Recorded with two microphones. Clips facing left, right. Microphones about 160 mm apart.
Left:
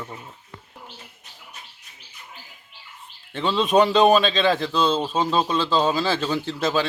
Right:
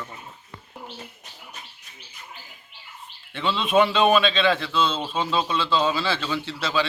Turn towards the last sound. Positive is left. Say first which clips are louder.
# left 3 dB
turn(degrees=45)  # may be behind; listen again after turning